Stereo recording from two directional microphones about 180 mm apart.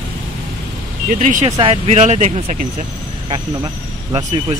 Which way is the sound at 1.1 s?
45° right (ahead or behind).